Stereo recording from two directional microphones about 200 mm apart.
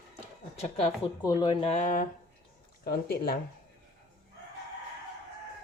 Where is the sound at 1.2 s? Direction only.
20° left (ahead or behind); by 3.4 s 50° left (ahead or behind).